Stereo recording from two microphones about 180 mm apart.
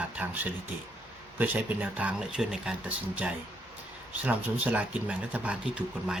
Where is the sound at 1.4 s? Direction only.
10° right (ahead or behind).